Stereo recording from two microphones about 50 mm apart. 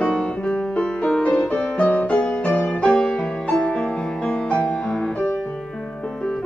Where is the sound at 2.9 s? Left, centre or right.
Centre.